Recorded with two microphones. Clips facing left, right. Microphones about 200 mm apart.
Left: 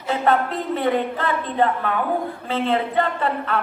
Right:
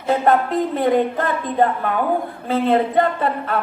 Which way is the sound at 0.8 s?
45° right (ahead or behind).